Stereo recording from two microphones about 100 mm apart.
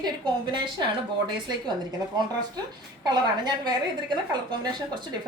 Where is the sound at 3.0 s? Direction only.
45° right (ahead or behind).